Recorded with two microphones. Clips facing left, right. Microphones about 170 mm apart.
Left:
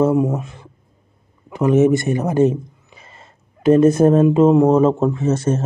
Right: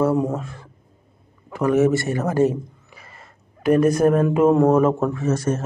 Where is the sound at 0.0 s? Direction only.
15° left (ahead or behind).